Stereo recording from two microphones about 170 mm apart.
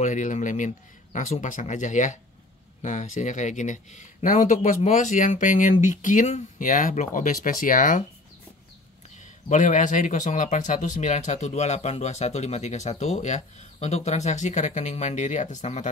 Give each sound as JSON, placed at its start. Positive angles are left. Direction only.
{"t": 0.0, "sound": "speech", "side_deg": 45}
{"t": 9.5, "sound": "speech", "side_deg": 45}